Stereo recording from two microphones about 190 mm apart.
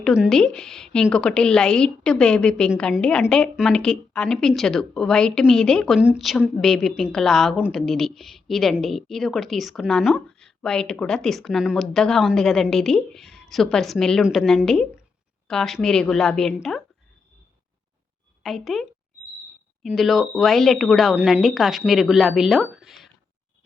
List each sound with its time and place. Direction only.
0.0 s a woman's voice: centre (ahead or behind)
18.4 s a woman's voice: centre (ahead or behind)